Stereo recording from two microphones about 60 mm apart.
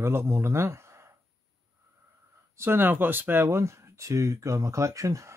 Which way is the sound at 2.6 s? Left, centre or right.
Right.